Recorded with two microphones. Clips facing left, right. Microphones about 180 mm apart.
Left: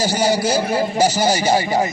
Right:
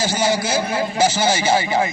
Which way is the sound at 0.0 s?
35° left (ahead or behind).